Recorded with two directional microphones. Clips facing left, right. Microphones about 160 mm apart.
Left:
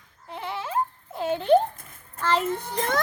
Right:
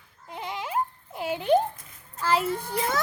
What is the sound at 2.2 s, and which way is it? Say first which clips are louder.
Children playing: even; 10° right (ahead or behind).